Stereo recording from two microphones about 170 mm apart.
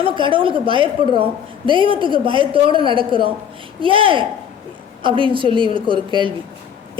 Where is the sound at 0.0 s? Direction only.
30° right (ahead or behind).